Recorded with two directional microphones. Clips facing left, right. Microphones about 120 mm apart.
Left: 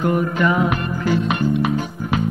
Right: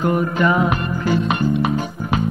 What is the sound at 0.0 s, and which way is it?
Music, 30° right (ahead or behind).